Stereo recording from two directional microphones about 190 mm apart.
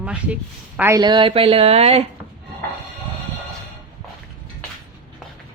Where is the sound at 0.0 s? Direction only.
5° right (ahead or behind).